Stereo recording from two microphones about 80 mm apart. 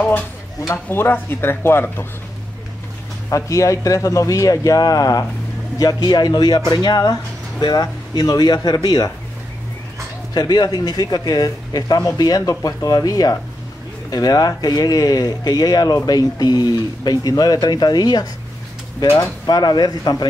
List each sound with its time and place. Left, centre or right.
0.8 s speech: left
3.3 s speech: left
10.3 s speech: left
19.4 s speech: left